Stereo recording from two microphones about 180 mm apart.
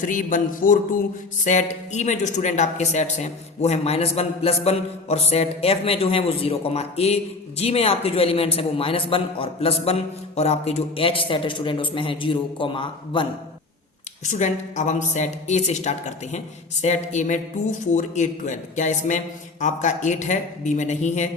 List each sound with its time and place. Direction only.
0.0 s a sound: 45° left (ahead or behind)
1.9 s a man's voice: 40° left (ahead or behind)
14.3 s a man's voice: 40° left (ahead or behind)